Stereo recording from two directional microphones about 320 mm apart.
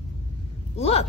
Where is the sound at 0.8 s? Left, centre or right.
Centre.